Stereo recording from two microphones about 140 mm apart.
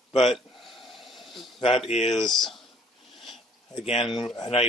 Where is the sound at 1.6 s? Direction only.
40° left (ahead or behind).